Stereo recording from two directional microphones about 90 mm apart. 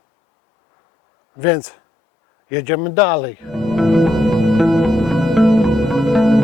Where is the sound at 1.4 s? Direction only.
20° left (ahead or behind).